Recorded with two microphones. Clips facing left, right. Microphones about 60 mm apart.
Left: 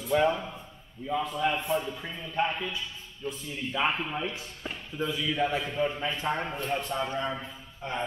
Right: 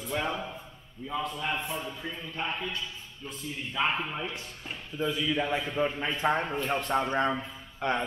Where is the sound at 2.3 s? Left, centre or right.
Centre.